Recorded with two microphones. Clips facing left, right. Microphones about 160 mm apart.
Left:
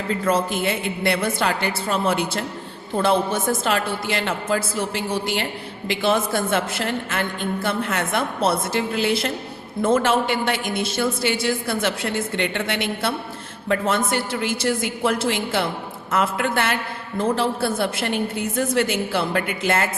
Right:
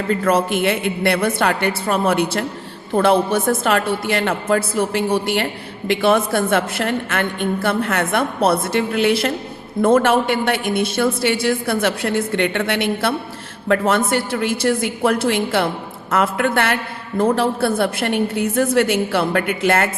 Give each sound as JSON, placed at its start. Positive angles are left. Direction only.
{"t": 0.1, "sound": "a woman's voice", "side_deg": -65}